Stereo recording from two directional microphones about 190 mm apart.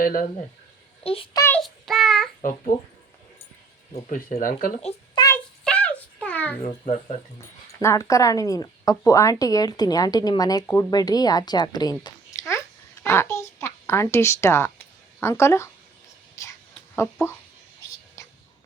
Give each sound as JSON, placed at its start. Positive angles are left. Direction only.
{"t": 0.0, "sound": "speech", "side_deg": 45}
{"t": 1.0, "sound": "a child's voice", "side_deg": 30}
{"t": 1.5, "sound": "child singing", "side_deg": 0}
{"t": 2.4, "sound": "speech", "side_deg": 45}
{"t": 3.9, "sound": "speech", "side_deg": 40}
{"t": 4.8, "sound": "a child's voice", "side_deg": 35}
{"t": 5.6, "sound": "a sound", "side_deg": 5}
{"t": 6.6, "sound": "a child's voice", "side_deg": 40}
{"t": 7.8, "sound": "a woman's voice", "side_deg": 15}
{"t": 16.3, "sound": "whispering", "side_deg": 15}